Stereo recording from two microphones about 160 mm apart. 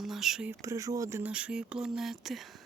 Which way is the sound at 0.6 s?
20° right (ahead or behind).